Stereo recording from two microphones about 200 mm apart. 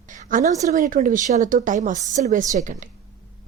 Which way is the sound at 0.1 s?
40° right (ahead or behind).